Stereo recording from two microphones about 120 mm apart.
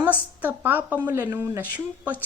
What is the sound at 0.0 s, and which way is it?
A woman's voice, 15° right (ahead or behind).